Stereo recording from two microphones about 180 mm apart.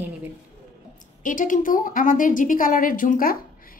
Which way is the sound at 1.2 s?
45° left (ahead or behind).